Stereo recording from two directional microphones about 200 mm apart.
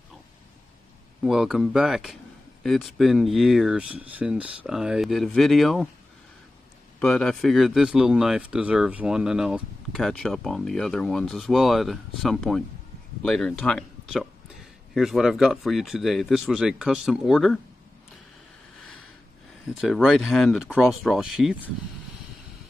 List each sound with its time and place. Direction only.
1.2 s speech: centre (ahead or behind)
7.0 s speech: 5° left (ahead or behind)
19.7 s speech: centre (ahead or behind)